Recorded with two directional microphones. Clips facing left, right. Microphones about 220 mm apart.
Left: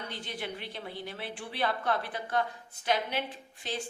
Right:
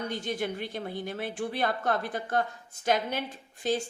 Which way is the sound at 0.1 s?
45° right (ahead or behind).